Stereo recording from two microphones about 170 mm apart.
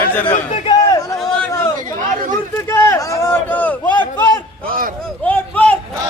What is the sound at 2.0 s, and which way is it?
Chatter, 50° right (ahead or behind).